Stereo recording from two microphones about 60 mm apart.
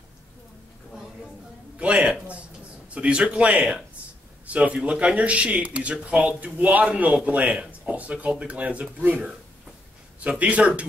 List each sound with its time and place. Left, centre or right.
1.8 s a sound: right
2.9 s speech: centre
10.4 s speech: right